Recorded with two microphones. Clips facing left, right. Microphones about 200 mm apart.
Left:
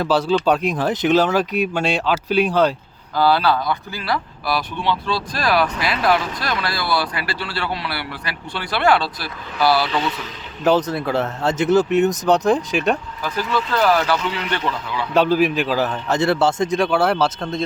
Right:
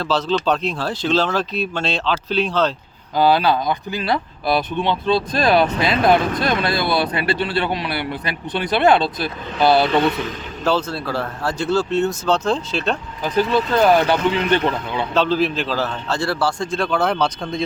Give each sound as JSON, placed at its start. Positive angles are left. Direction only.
{"t": 0.0, "sound": "a man's voice", "side_deg": 10}
{"t": 3.2, "sound": "a man's voice", "side_deg": -15}
{"t": 6.1, "sound": "speech", "side_deg": -55}
{"t": 6.4, "sound": "a man's voice", "side_deg": -20}
{"t": 10.6, "sound": "a man's voice", "side_deg": 15}
{"t": 13.2, "sound": "a man's voice", "side_deg": -20}
{"t": 15.1, "sound": "a man's voice", "side_deg": 15}